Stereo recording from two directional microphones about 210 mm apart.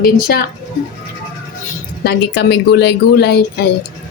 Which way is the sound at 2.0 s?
50° left (ahead or behind).